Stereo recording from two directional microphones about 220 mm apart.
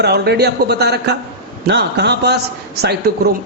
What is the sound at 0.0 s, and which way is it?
A man's voice, 50° right (ahead or behind).